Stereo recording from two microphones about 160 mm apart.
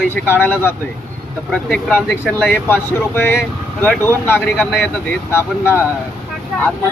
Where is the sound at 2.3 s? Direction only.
10° left (ahead or behind).